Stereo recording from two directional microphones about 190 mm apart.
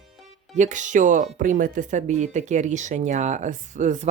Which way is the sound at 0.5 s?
40° right (ahead or behind).